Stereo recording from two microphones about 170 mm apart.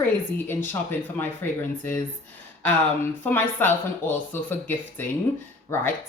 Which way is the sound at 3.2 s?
10° left (ahead or behind).